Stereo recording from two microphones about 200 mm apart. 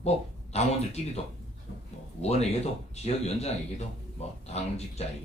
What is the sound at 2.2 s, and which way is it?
Speech, 30° left (ahead or behind).